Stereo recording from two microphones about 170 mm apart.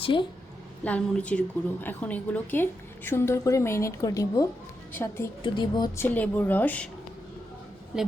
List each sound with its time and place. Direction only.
0.0 s a woman's voice: 30° left (ahead or behind)
0.9 s a woman's voice: 10° left (ahead or behind)
5.4 s a woman's voice: 25° left (ahead or behind)
6.1 s a woman's voice: 10° left (ahead or behind)